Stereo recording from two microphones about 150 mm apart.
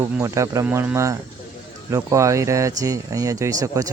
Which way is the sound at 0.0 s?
20° right (ahead or behind).